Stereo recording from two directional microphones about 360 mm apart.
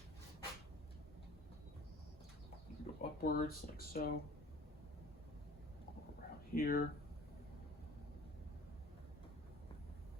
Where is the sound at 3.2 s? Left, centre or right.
Left.